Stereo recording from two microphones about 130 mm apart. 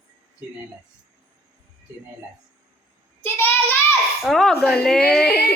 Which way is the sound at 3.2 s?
15° left (ahead or behind).